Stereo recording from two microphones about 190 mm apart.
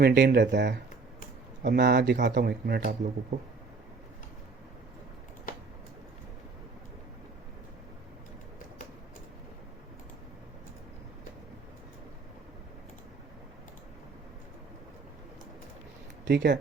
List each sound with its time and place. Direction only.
0.0 s speech: 65° right (ahead or behind); by 3.3 s 45° right (ahead or behind)
16.2 s speech: 65° right (ahead or behind)